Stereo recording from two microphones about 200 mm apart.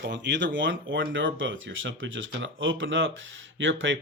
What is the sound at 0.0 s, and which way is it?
Speech, 60° right (ahead or behind).